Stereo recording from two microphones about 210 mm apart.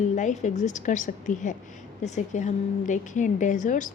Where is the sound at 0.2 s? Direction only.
35° left (ahead or behind).